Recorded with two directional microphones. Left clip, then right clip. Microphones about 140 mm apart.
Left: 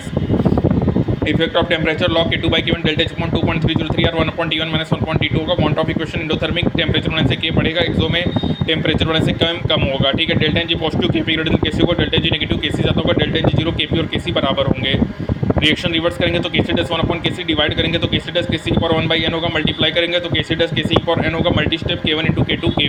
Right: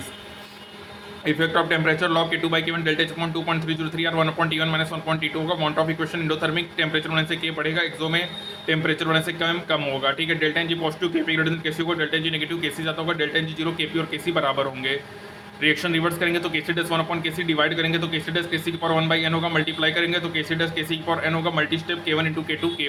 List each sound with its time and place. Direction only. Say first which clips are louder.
1.3 s speech: left 3 dB; 15° left (ahead or behind)
5.5 s speech: left 3 dB; 10° left (ahead or behind)